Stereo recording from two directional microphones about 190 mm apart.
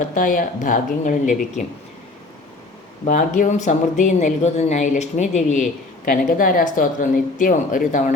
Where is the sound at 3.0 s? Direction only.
45° left (ahead or behind).